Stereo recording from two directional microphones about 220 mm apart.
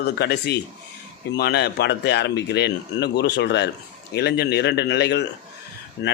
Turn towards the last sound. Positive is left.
turn(degrees=50)  # may be behind; listen again after turning